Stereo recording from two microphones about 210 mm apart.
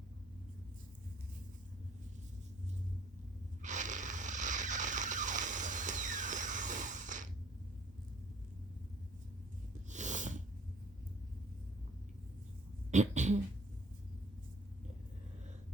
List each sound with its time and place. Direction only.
3.6 s a sound: 35° right (ahead or behind)
9.9 s sniff: 35° right (ahead or behind)
12.9 s beatboxing: 35° right (ahead or behind)